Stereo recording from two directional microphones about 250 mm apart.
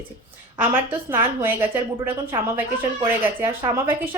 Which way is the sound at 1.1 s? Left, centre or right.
Centre.